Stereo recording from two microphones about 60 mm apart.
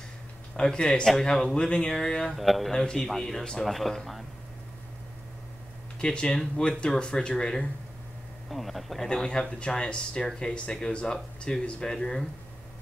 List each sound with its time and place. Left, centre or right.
0.6 s speech: centre
2.3 s speech: centre
2.7 s speech: centre
3.6 s speech: centre
5.9 s speech: centre
8.5 s speech: centre
9.1 s speech: centre